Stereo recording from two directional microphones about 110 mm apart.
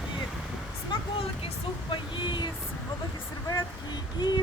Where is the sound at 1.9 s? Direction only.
45° left (ahead or behind).